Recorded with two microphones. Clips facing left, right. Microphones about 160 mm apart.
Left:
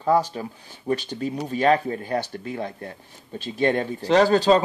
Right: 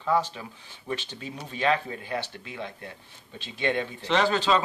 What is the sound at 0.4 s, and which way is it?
Speech, 40° left (ahead or behind).